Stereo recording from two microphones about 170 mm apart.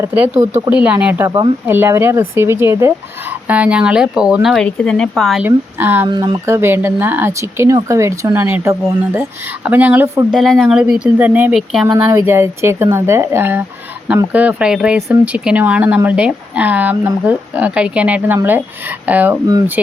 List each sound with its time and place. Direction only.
0.0 s speech: 15° right (ahead or behind)
5.5 s speech: 10° right (ahead or behind)
6.1 s speech: 25° right (ahead or behind); by 10.4 s 10° right (ahead or behind)
10.4 s speech: centre (ahead or behind)